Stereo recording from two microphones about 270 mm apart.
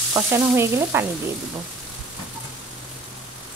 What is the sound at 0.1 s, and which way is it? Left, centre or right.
Frying, centre.